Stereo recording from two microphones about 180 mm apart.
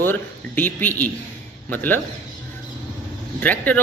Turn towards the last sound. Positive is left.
turn(degrees=10)  # may be behind; listen again after turning